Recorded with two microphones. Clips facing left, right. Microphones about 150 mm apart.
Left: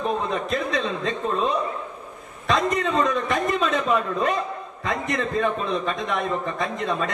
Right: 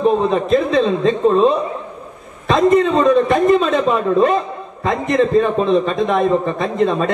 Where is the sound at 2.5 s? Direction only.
25° right (ahead or behind).